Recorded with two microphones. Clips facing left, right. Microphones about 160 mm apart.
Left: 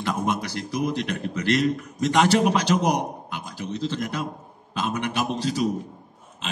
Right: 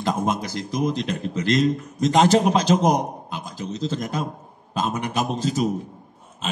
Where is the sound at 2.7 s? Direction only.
30° right (ahead or behind).